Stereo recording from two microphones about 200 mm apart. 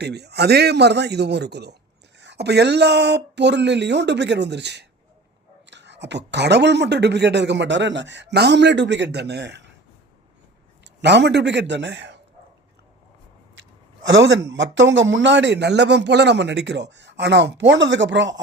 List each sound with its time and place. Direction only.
0.0 s speech: 55° right (ahead or behind)
11.0 s speech: 60° right (ahead or behind)
14.2 s speech: 60° right (ahead or behind)